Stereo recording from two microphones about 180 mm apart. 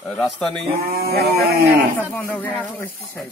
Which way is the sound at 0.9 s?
60° right (ahead or behind).